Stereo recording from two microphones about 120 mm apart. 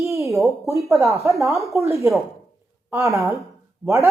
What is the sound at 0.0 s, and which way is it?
A woman's voice, 25° right (ahead or behind).